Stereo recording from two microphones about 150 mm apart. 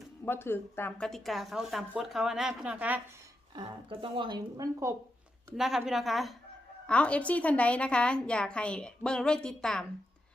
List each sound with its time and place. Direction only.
0.3 s speech: 15° left (ahead or behind); by 3.0 s 10° right (ahead or behind)
3.5 s speech: 30° right (ahead or behind)
5.5 s a woman's voice: centre (ahead or behind)